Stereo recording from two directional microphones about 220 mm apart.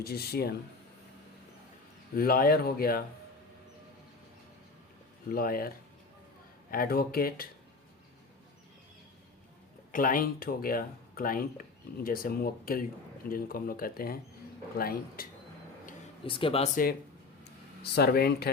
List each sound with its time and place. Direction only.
0.0 s speech: 45° left (ahead or behind)
2.1 s speech: 40° left (ahead or behind)
5.3 s speech: 40° left (ahead or behind)
9.9 s speech: 40° left (ahead or behind)
16.2 s speech: 25° left (ahead or behind)
17.9 s speech: 45° left (ahead or behind)